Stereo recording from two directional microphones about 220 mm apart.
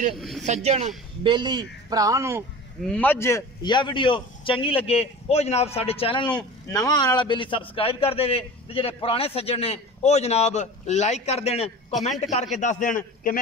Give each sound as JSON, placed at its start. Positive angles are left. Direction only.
{"t": 0.1, "sound": "speech", "side_deg": 0}
{"t": 0.4, "sound": "a woman's voice", "side_deg": -30}
{"t": 2.9, "sound": "a man's voice", "side_deg": 5}